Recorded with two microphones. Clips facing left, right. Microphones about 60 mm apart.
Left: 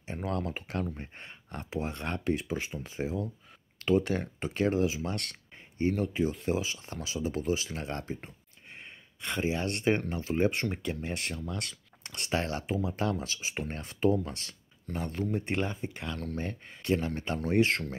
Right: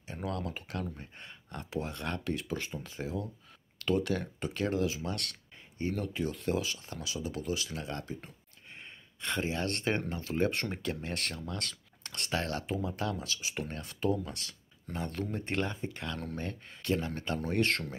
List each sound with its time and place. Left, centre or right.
0.1 s speech: left
5.9 s speech: centre
6.9 s speech: left
9.2 s speech: centre; by 14.5 s left
14.9 s speech: centre
17.5 s speech: centre